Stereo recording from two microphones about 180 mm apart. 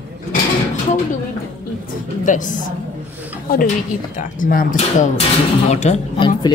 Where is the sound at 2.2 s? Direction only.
45° left (ahead or behind).